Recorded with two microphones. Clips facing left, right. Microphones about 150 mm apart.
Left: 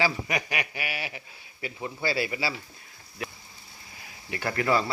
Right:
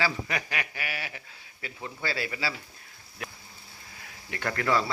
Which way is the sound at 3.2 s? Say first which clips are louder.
Left 4 dB; centre (ahead or behind).